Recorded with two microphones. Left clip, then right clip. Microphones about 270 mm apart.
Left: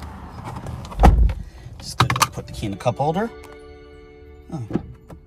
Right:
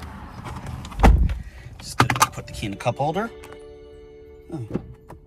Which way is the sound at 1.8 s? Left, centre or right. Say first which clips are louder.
Even; centre.